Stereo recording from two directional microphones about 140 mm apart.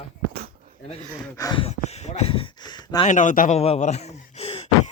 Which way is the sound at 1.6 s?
50° left (ahead or behind).